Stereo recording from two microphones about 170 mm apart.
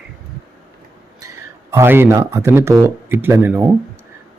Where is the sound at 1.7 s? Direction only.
15° right (ahead or behind).